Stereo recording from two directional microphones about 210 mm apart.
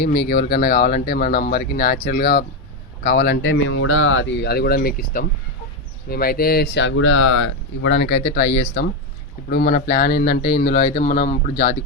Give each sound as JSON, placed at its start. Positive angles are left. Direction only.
{"t": 0.0, "sound": "speech", "side_deg": 50}
{"t": 7.9, "sound": "speech", "side_deg": 50}